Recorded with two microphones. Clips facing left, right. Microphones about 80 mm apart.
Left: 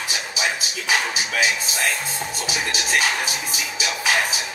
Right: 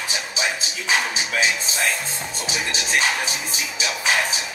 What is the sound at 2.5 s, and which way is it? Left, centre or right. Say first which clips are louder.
Speech: even; right.